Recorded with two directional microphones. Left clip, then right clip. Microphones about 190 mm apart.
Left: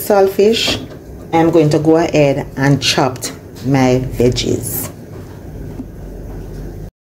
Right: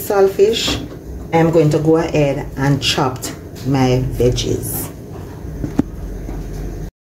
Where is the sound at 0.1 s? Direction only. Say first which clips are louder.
Left 2 dB; 40° left (ahead or behind).